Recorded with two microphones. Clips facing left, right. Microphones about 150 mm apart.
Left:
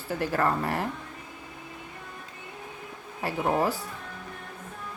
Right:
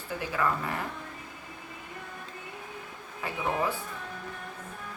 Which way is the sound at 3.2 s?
40° left (ahead or behind).